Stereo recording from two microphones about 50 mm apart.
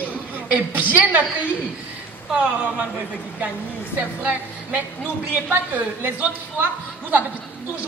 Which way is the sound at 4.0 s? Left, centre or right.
Right.